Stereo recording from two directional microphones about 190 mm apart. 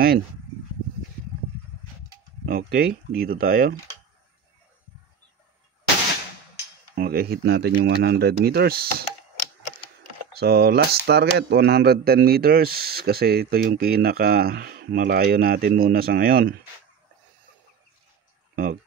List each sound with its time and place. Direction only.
2.4 s speech: 50° right (ahead or behind)
7.0 s speech: 55° right (ahead or behind)
10.4 s speech: 55° right (ahead or behind)